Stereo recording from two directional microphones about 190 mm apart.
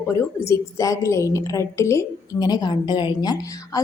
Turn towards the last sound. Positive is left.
turn(degrees=20)  # may be behind; listen again after turning